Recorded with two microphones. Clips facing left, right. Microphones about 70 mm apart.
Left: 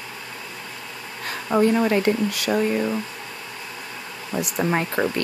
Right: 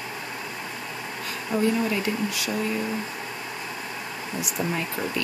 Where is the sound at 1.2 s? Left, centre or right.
Left.